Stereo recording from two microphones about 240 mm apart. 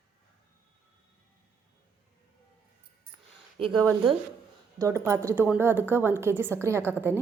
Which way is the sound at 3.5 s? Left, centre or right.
Centre.